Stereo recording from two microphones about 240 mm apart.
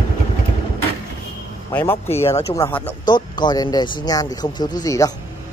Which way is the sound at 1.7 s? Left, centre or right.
Centre.